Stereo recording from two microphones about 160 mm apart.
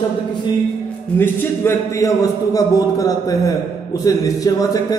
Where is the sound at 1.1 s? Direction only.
15° left (ahead or behind).